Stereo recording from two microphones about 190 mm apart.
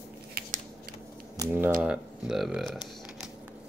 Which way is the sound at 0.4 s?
55° right (ahead or behind).